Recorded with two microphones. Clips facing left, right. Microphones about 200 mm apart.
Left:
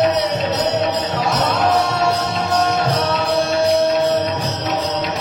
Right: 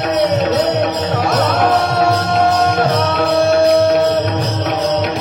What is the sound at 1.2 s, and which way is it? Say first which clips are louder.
Music: right 3 dB; 60° right (ahead or behind).